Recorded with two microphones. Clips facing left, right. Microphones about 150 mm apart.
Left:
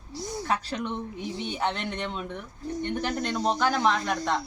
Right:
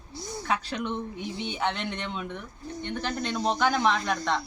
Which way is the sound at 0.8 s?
Centre (ahead or behind).